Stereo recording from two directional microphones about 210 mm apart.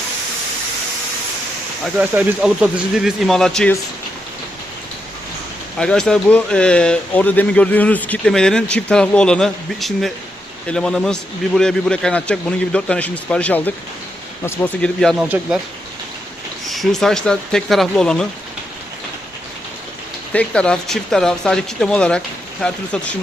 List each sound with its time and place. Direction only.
1.8 s speech: 5° right (ahead or behind)
5.7 s speech: 5° left (ahead or behind)
15.3 s speech: 10° right (ahead or behind)
16.6 s speech: centre (ahead or behind)
20.3 s speech: 5° left (ahead or behind)